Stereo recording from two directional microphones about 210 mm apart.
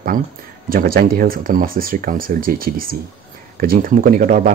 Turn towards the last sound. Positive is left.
turn(degrees=-40)  # may be behind; listen again after turning